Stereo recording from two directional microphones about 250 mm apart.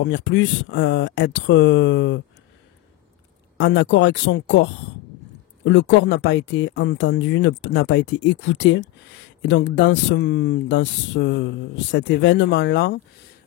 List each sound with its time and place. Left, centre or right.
0.0 s speech: left
3.5 s speech: left
5.7 s speech: left